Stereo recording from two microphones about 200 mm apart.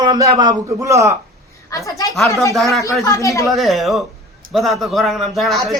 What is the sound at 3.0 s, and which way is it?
Speech, 15° left (ahead or behind).